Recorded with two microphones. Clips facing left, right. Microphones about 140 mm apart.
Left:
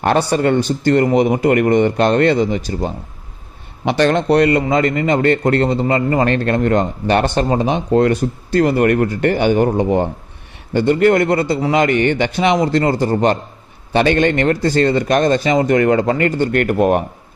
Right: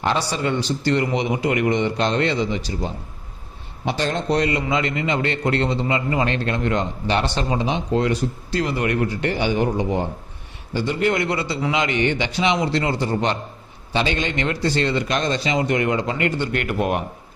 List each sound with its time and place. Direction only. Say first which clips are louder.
0.0 s a man's voice: left 7 dB; 55° left (ahead or behind)
3.8 s speech: left 8 dB; 70° left (ahead or behind)
4.6 s a man's voice: left 7 dB; 50° left (ahead or behind)